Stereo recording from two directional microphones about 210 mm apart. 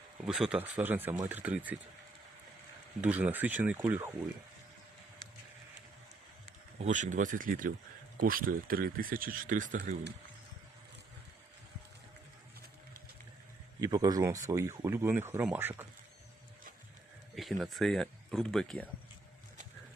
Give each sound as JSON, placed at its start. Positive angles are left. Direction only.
{"t": 0.3, "sound": "speech", "side_deg": -5}
{"t": 3.0, "sound": "speech", "side_deg": -10}
{"t": 6.7, "sound": "speech", "side_deg": -35}
{"t": 13.8, "sound": "speech", "side_deg": -20}
{"t": 17.3, "sound": "speech", "side_deg": 0}